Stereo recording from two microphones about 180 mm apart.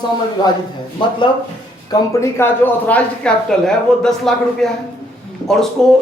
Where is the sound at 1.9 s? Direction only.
15° left (ahead or behind).